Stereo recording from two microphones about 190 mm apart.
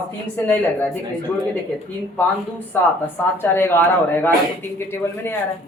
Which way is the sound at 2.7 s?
10° left (ahead or behind).